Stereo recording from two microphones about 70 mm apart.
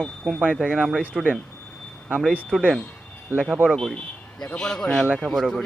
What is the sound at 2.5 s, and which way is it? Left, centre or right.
Speech, centre.